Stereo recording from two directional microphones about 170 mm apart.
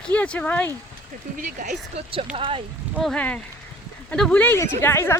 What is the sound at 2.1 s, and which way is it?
Speech, 30° right (ahead or behind).